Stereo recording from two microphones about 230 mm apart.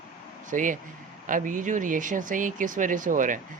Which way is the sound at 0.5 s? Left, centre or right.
Right.